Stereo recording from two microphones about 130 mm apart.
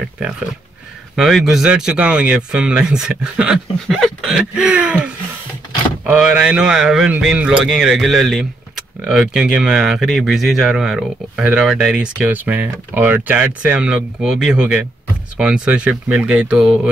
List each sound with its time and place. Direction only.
1.1 s a man's voice: centre (ahead or behind)